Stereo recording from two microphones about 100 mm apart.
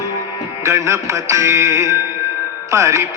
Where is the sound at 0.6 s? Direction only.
30° right (ahead or behind).